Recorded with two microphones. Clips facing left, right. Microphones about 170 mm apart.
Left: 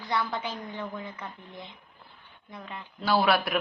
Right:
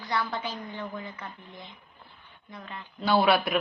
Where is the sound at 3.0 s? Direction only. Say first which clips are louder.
Right 1 dB; centre (ahead or behind).